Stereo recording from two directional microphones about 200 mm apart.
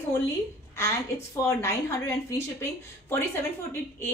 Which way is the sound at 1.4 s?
15° left (ahead or behind).